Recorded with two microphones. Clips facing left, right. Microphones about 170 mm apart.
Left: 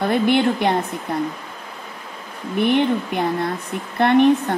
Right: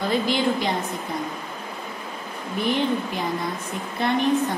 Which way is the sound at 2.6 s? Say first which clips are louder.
Left 5 dB; 60° left (ahead or behind).